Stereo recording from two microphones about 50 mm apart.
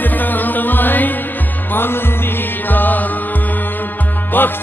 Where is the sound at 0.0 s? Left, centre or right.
Left.